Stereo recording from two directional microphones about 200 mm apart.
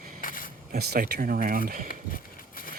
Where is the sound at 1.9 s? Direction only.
45° left (ahead or behind).